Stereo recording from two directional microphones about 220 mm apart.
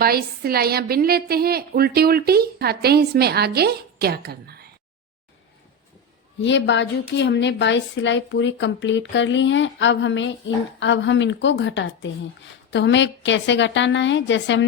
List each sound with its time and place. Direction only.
0.0 s a woman's voice: 45° right (ahead or behind)
6.4 s a woman's voice: 55° left (ahead or behind)